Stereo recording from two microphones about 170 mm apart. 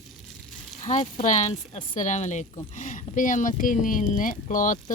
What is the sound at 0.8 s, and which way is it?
Speech, 45° left (ahead or behind).